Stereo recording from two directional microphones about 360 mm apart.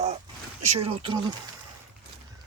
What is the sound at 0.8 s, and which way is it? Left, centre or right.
Speech, centre.